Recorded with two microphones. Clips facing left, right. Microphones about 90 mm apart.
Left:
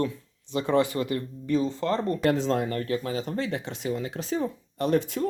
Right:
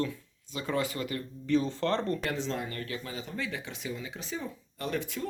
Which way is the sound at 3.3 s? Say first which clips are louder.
Left 7 dB; 40° left (ahead or behind).